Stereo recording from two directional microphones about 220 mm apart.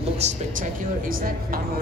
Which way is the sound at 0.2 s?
35° right (ahead or behind).